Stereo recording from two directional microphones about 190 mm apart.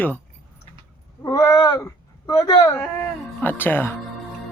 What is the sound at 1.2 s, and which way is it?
Speech, 15° left (ahead or behind).